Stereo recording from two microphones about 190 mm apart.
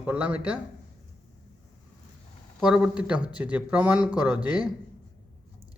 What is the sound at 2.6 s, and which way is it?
Speech, 5° right (ahead or behind).